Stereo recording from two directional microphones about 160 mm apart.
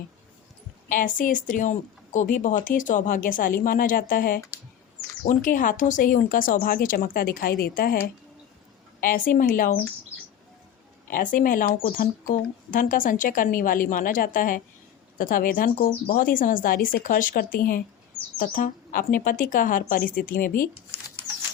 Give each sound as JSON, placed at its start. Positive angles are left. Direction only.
{"t": 0.9, "sound": "speech", "side_deg": 55}
{"t": 11.1, "sound": "speech", "side_deg": 60}